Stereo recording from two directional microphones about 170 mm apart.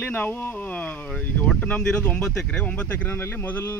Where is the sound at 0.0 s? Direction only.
10° left (ahead or behind).